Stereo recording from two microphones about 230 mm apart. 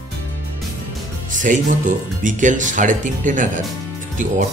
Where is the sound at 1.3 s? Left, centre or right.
Right.